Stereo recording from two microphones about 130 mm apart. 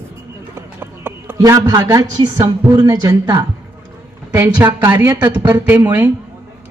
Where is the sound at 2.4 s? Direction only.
35° right (ahead or behind).